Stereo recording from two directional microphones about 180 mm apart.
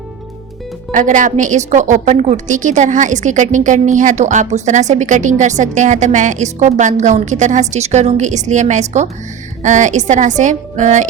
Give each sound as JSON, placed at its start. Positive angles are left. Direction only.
{"t": 0.9, "sound": "a woman's voice", "side_deg": -45}